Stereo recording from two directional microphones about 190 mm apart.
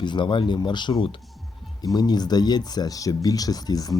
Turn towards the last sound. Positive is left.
turn(degrees=20)  # may be behind; listen again after turning